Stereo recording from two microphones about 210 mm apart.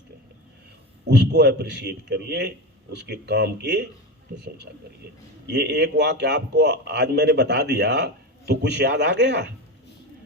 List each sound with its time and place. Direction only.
1.0 s a man's voice: 55° right (ahead or behind)
5.5 s a man's voice: 55° right (ahead or behind)